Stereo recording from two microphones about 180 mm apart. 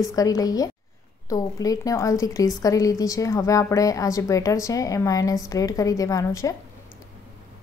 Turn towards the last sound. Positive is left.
turn(degrees=20)  # may be behind; listen again after turning